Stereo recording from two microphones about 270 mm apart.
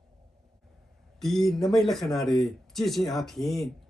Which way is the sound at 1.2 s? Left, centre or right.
Centre.